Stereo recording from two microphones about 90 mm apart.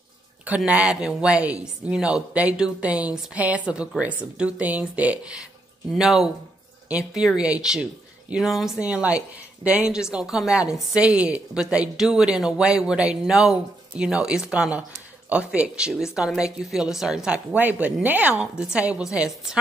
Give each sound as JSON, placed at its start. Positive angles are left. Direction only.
{"t": 0.7, "sound": "a woman's voice", "side_deg": -10}
{"t": 5.9, "sound": "a woman's voice", "side_deg": -5}
{"t": 8.7, "sound": "a woman's voice", "side_deg": -15}
{"t": 17.6, "sound": "a woman's voice", "side_deg": -15}